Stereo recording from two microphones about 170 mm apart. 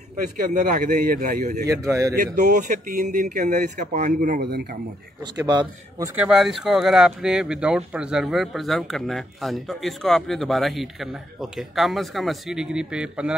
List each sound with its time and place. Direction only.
0.5 s speech: 50° right (ahead or behind)
1.7 s a man's voice: 20° right (ahead or behind)
2.1 s speech: 70° right (ahead or behind)
2.5 s speech: 50° right (ahead or behind); by 4.7 s 65° right (ahead or behind)
5.2 s a man's voice: 25° right (ahead or behind)
6.1 s speech: 5° right (ahead or behind)